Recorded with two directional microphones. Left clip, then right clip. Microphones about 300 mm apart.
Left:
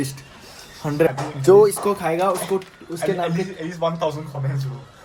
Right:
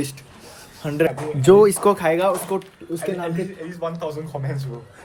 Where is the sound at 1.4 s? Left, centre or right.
Right.